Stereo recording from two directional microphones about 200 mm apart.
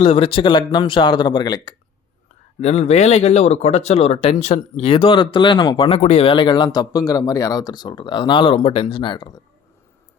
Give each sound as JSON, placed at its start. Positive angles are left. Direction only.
{"t": 0.0, "sound": "a man's voice", "side_deg": 25}
{"t": 2.6, "sound": "a man's voice", "side_deg": 35}